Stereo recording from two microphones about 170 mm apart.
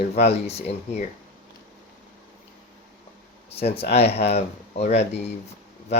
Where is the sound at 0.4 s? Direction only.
35° left (ahead or behind).